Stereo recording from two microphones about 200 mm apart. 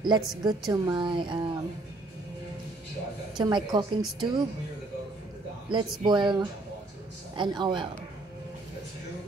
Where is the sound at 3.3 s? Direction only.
20° right (ahead or behind).